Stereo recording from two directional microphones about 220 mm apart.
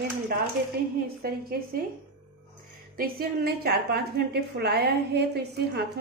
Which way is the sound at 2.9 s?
40° right (ahead or behind).